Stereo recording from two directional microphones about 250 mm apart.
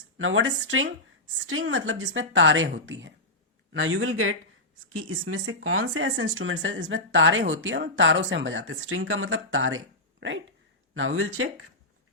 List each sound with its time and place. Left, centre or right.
0.2 s a man's voice: right